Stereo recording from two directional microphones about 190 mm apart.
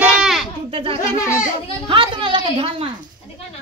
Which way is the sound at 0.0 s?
5° right (ahead or behind).